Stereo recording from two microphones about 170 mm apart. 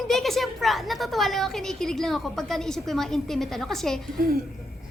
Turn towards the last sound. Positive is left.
turn(degrees=-65)  # may be behind; listen again after turning